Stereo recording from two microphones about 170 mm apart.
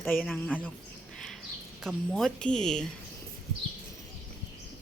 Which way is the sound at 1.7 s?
Centre (ahead or behind).